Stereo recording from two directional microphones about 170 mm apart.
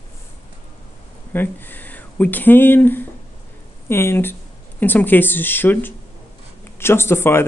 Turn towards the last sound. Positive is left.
turn(degrees=15)  # may be behind; listen again after turning